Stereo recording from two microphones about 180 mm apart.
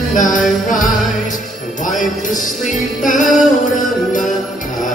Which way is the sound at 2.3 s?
45° left (ahead or behind).